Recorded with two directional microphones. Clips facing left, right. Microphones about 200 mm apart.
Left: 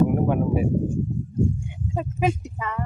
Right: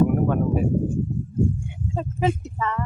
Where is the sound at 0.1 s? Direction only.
15° left (ahead or behind).